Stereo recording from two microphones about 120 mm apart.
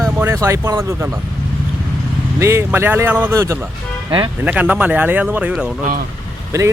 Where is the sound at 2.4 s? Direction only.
20° right (ahead or behind).